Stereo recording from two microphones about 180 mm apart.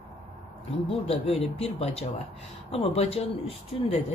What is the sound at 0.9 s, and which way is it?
Speech, 35° left (ahead or behind).